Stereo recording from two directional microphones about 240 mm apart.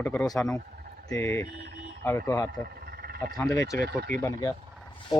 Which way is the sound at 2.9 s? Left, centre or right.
Right.